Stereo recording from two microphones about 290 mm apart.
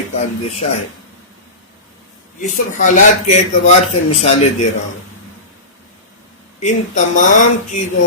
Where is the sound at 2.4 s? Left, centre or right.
Left.